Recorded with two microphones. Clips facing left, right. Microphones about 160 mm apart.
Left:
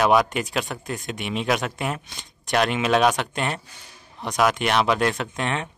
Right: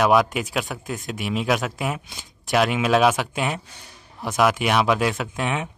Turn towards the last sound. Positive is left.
turn(degrees=-5)  # may be behind; listen again after turning